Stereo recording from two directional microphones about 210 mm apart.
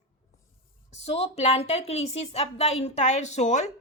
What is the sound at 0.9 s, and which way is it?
Speech, 30° left (ahead or behind).